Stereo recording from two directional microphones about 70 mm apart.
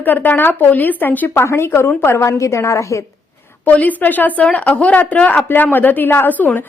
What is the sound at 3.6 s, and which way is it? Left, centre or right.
A woman's voice, left.